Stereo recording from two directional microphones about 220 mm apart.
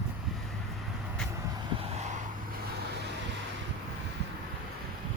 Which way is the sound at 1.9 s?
30° right (ahead or behind).